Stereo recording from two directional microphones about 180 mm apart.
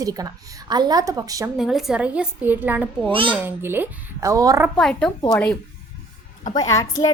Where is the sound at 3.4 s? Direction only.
10° right (ahead or behind).